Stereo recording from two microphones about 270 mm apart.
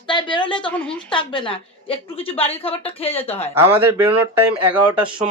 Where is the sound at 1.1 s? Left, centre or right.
Centre.